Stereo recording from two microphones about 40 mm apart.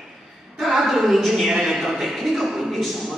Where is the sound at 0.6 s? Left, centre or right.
Centre.